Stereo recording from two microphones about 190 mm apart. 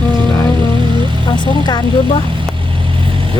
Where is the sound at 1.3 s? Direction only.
25° left (ahead or behind).